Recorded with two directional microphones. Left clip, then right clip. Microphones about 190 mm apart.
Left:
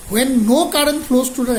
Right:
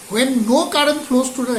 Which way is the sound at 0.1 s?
40° left (ahead or behind).